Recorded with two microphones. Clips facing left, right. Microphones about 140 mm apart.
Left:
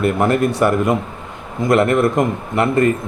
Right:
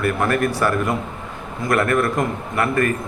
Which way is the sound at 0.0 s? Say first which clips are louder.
Left 4 dB; 20° left (ahead or behind).